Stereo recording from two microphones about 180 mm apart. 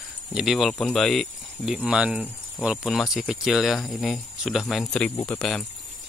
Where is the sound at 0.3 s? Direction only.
5° right (ahead or behind).